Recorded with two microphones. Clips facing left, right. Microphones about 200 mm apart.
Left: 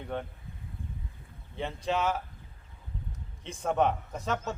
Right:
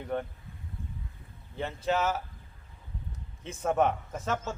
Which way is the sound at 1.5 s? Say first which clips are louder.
Right 1 dB; centre (ahead or behind).